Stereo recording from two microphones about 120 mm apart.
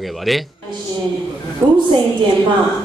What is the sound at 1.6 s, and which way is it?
Speech, 20° right (ahead or behind).